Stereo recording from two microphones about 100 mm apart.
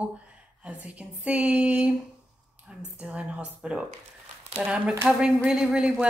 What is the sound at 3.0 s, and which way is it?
Speech, 10° right (ahead or behind).